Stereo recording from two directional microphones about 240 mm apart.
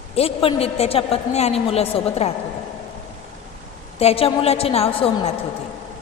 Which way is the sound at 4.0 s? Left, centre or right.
Left.